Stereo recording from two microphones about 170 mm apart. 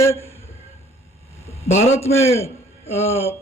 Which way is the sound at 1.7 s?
40° left (ahead or behind).